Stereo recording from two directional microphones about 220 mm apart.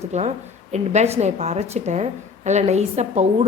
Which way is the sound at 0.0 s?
30° right (ahead or behind).